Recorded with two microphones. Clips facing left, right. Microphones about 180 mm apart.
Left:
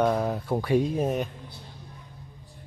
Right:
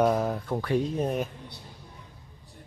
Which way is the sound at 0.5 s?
10° left (ahead or behind).